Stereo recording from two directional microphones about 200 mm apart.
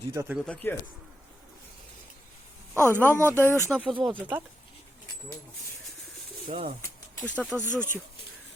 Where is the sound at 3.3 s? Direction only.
10° left (ahead or behind).